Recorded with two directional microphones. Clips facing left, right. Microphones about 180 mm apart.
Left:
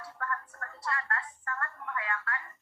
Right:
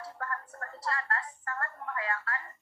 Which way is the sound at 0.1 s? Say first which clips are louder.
Left 4 dB; 35° right (ahead or behind).